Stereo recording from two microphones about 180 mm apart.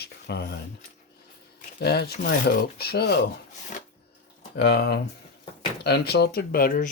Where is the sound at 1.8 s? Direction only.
65° left (ahead or behind).